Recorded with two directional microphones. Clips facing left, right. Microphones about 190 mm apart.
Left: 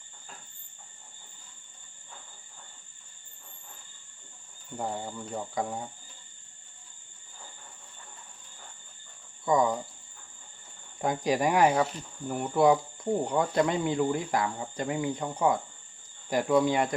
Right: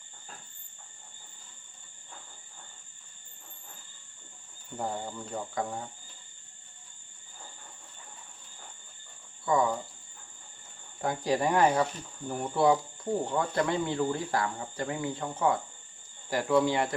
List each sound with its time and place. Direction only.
4.8 s speech: 5° left (ahead or behind)
9.4 s speech: 15° left (ahead or behind)
11.0 s speech: 15° left (ahead or behind)